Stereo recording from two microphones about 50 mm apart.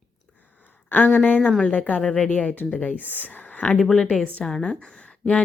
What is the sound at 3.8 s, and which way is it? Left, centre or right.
Speech, centre.